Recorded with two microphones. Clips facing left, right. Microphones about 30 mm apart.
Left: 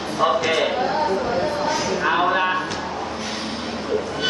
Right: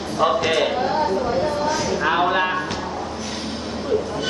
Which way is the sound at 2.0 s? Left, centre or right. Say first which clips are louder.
Even; centre.